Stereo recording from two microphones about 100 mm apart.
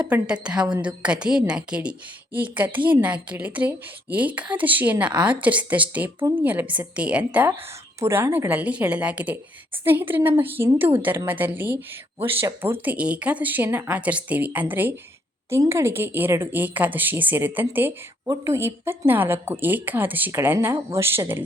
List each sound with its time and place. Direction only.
0.0 s a woman's voice: 15° right (ahead or behind)